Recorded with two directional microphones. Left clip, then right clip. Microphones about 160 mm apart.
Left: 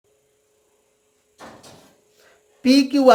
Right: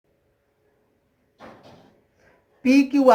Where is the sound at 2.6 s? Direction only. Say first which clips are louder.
Left 2 dB; 30° left (ahead or behind).